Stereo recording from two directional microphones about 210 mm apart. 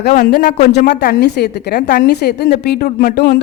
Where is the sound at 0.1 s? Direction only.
35° left (ahead or behind).